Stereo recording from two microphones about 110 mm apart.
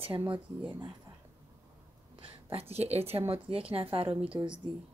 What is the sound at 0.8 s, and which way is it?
Speech, 40° right (ahead or behind).